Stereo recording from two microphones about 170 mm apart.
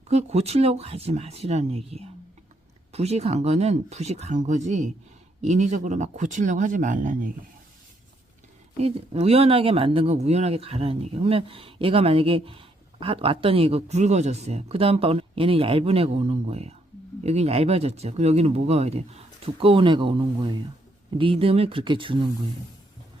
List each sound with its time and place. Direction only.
0.1 s speech: 40° right (ahead or behind)
8.8 s speech: 35° right (ahead or behind)